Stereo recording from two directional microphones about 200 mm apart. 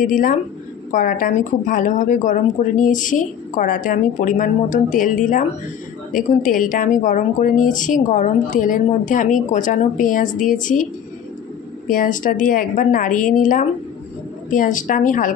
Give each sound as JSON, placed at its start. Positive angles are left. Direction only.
{"t": 0.0, "sound": "a woman's voice", "side_deg": 40}
{"t": 11.9, "sound": "a woman's voice", "side_deg": 40}